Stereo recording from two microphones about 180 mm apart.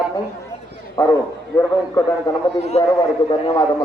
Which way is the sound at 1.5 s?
15° left (ahead or behind).